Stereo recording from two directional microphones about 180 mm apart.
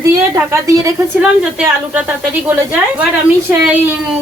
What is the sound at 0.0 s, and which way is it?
A woman's voice, 15° right (ahead or behind).